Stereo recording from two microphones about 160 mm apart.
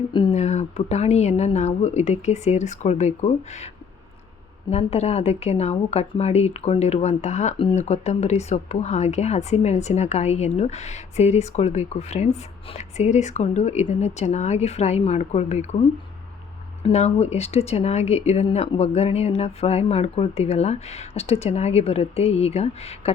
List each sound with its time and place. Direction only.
0.1 s a sound: 30° left (ahead or behind)
0.3 s speech: 45° left (ahead or behind)
4.7 s speech: 40° left (ahead or behind)
16.8 s speech: 40° left (ahead or behind)